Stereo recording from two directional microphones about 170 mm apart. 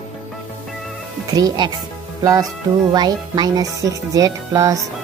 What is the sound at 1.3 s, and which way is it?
Speech, 20° right (ahead or behind).